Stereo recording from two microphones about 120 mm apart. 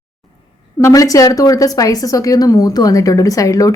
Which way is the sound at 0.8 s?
30° left (ahead or behind).